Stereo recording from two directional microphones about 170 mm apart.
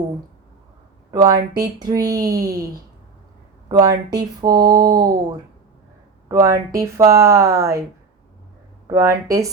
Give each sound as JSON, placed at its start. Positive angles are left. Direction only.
{"t": 1.1, "sound": "speech", "side_deg": -20}
{"t": 3.7, "sound": "speech", "side_deg": -20}
{"t": 6.2, "sound": "speech", "side_deg": -20}
{"t": 8.9, "sound": "speech", "side_deg": -15}